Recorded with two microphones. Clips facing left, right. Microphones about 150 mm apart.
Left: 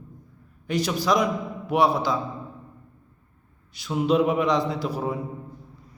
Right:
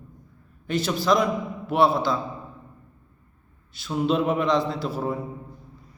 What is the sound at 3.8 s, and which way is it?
A man's voice, 10° left (ahead or behind).